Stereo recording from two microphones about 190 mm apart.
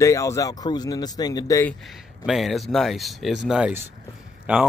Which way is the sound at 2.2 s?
Centre (ahead or behind).